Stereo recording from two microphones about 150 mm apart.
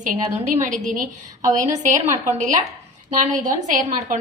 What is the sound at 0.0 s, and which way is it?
A woman's voice, 50° right (ahead or behind).